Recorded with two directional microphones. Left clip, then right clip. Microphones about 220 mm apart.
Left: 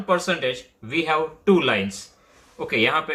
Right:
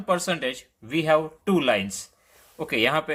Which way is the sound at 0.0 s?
50° right (ahead or behind).